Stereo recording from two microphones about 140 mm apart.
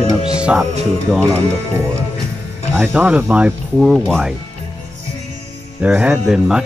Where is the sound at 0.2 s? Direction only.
5° right (ahead or behind).